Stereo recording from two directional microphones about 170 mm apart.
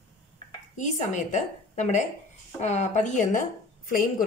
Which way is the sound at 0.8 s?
45° left (ahead or behind).